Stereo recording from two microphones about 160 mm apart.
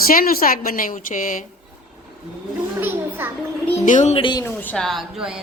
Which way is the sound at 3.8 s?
50° left (ahead or behind).